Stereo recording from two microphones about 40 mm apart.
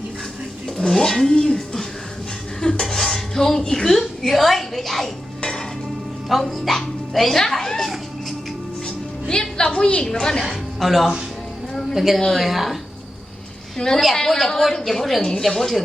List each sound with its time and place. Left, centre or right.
0.8 s speech: centre
1.5 s a sound: centre
2.6 s dishes: left
2.8 s dishes: centre
3.6 s a woman's voice: centre
5.4 s dishes: centre
6.4 s speech: centre
9.2 s a woman's voice: centre
10.1 s speech: centre
10.4 s a woman's voice: centre
11.7 s a sound: centre
11.9 s a woman's voice: centre
13.7 s speech: centre